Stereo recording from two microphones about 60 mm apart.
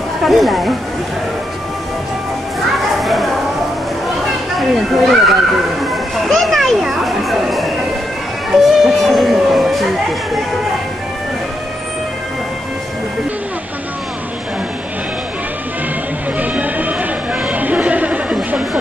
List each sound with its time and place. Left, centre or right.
0.2 s speech: centre
3.0 s a sound: centre
4.3 s speech: centre
16.3 s music: right
17.4 s chatter: right